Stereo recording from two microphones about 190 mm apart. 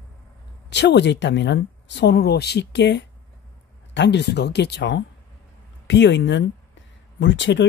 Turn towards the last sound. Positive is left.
turn(degrees=70)  # may be behind; listen again after turning